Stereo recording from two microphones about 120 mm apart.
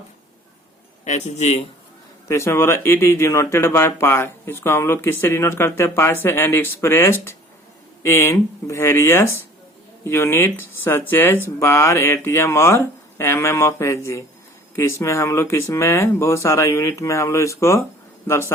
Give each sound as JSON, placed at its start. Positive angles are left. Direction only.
{"t": 1.0, "sound": "a man's voice", "side_deg": 70}
{"t": 2.2, "sound": "speech", "side_deg": 25}